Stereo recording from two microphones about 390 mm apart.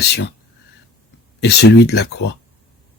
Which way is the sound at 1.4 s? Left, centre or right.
Left.